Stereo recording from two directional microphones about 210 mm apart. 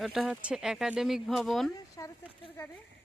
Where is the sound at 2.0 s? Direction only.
15° left (ahead or behind).